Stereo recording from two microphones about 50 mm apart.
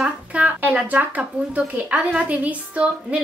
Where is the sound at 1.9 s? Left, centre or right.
Centre.